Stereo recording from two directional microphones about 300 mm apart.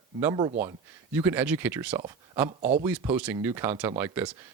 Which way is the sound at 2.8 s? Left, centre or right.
Centre.